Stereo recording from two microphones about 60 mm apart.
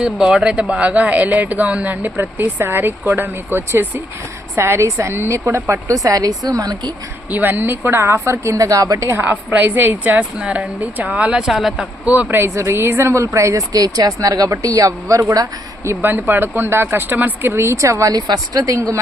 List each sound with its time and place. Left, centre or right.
0.0 s speech: centre; by 3.8 s right
4.5 s a woman's voice: right
5.3 s speech: right
7.3 s speech: right
8.1 s a woman's voice: right
9.0 s speech: right
10.2 s speech: centre
12.0 s speech: right
12.5 s a woman's voice: right
13.2 s a woman's voice: right
13.6 s speech: right
16.0 s speech: right
17.7 s a woman's voice: right
18.1 s speech: right